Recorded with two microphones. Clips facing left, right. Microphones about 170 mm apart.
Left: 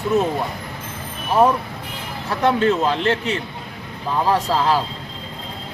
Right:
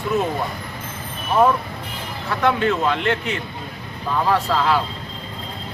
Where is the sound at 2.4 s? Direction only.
30° left (ahead or behind).